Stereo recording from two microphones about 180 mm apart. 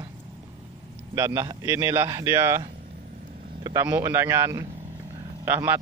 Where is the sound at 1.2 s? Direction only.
20° right (ahead or behind).